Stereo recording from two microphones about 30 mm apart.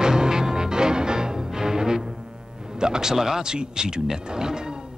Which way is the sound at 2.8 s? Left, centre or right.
Right.